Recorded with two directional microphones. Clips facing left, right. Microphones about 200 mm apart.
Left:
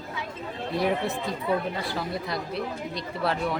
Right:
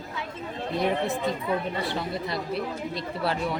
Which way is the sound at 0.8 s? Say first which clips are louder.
Right 1 dB; centre (ahead or behind).